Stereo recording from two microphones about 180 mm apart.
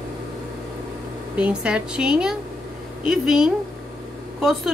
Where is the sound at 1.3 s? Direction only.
5° right (ahead or behind).